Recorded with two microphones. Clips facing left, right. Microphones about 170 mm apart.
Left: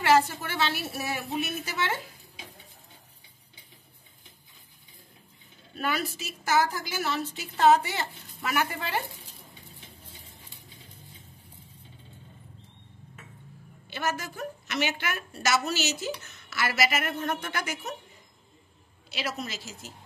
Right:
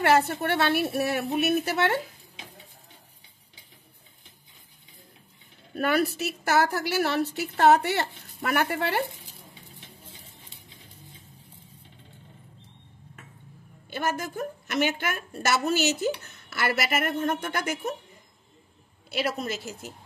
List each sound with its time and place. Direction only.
0.0 s a woman's voice: 60° right (ahead or behind)
5.8 s a woman's voice: 60° right (ahead or behind)
13.8 s a woman's voice: 50° right (ahead or behind)
17.1 s speech: 30° right (ahead or behind)
17.4 s a woman's voice: 50° right (ahead or behind)
19.0 s a woman's voice: 55° right (ahead or behind)